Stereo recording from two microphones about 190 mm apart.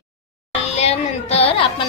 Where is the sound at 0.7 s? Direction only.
35° left (ahead or behind).